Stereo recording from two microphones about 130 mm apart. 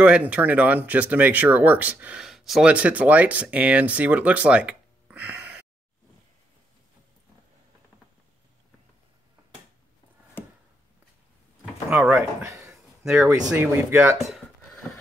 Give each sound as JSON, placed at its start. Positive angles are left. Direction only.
{"t": 0.0, "sound": "speech", "side_deg": -10}
{"t": 11.9, "sound": "speech", "side_deg": -10}
{"t": 12.4, "sound": "a sound", "side_deg": -25}
{"t": 13.0, "sound": "speech", "side_deg": -5}
{"t": 13.6, "sound": "speech", "side_deg": -20}
{"t": 14.1, "sound": "a sound", "side_deg": 0}